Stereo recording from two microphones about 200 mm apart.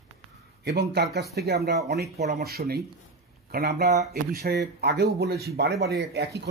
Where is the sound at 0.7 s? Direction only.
55° right (ahead or behind).